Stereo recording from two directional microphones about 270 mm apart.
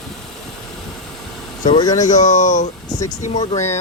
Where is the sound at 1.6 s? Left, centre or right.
Centre.